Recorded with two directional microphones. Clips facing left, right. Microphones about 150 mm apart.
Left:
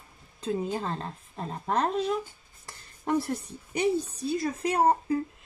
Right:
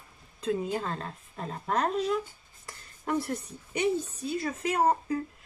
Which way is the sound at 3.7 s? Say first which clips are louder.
Left 2 dB; 35° left (ahead or behind).